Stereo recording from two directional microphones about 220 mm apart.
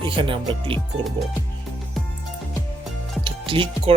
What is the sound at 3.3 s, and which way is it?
Music, 25° right (ahead or behind).